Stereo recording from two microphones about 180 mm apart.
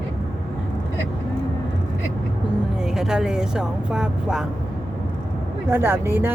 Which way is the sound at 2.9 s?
5° right (ahead or behind).